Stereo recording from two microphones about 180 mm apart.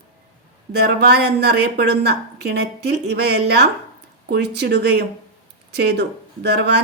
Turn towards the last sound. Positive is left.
turn(degrees=-65)  # may be behind; listen again after turning